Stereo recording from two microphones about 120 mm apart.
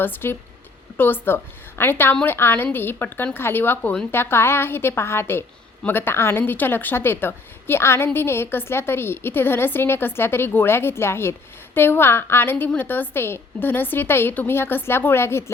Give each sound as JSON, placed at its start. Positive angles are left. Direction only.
{"t": 0.0, "sound": "a woman's voice", "side_deg": 20}